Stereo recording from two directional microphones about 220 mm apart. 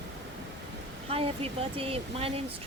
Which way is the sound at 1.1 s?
25° right (ahead or behind).